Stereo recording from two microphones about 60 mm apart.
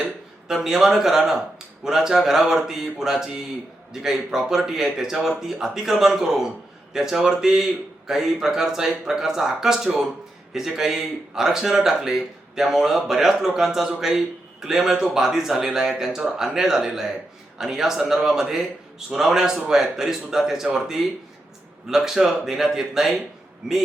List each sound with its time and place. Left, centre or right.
0.0 s a man's voice: centre